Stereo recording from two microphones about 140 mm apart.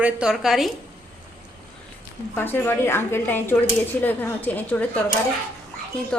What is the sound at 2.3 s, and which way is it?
A woman's voice, 15° left (ahead or behind).